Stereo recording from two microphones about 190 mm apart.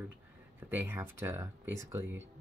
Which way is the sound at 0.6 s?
10° right (ahead or behind).